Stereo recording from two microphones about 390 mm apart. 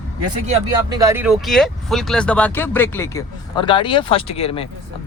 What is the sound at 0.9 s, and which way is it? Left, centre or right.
Speech, centre.